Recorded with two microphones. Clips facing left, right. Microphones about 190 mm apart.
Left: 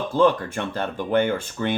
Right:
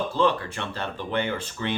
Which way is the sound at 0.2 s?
50° left (ahead or behind).